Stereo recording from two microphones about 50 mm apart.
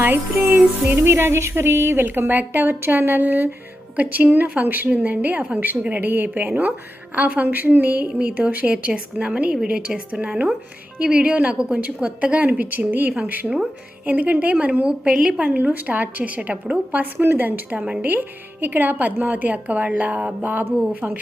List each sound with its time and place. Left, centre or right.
0.0 s speech: right
0.9 s a woman's voice: right
5.9 s a woman's voice: right; by 15.3 s centre
15.3 s a woman's voice: right
17.7 s a woman's voice: right
18.0 s a woman's voice: right